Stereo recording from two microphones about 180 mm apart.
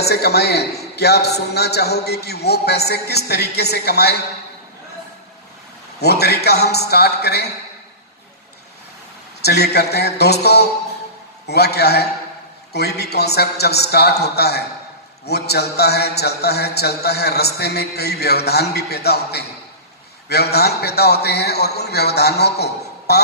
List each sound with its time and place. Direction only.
0.0 s a man's voice: 65° left (ahead or behind)
5.9 s a man's voice: 65° left (ahead or behind)
9.4 s a man's voice: 65° left (ahead or behind)